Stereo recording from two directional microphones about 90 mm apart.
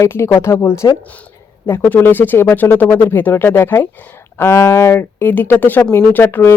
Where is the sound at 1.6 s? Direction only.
25° left (ahead or behind).